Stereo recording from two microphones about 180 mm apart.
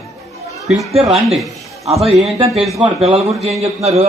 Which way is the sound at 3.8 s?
35° right (ahead or behind).